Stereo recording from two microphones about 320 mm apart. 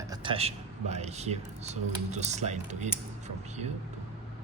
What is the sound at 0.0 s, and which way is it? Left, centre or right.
Speech, centre.